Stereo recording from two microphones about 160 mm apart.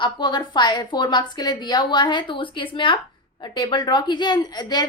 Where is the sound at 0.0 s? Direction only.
30° left (ahead or behind).